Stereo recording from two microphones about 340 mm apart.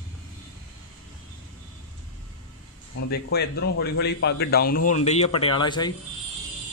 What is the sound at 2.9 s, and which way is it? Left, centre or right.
A man's voice, left.